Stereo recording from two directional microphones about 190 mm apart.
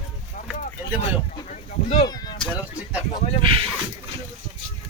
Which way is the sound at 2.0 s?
20° left (ahead or behind).